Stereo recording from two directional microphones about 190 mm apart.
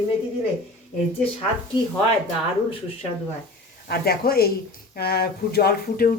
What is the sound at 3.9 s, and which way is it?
Speech, 55° left (ahead or behind).